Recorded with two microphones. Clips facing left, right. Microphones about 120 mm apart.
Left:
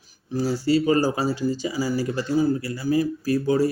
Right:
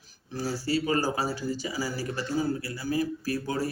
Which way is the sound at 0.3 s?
20° left (ahead or behind).